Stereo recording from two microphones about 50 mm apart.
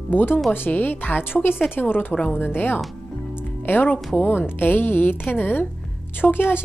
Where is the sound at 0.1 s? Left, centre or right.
Left.